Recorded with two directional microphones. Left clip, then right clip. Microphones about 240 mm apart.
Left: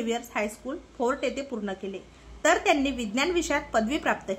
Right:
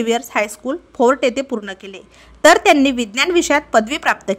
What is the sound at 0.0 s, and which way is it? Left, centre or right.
A woman's voice, right.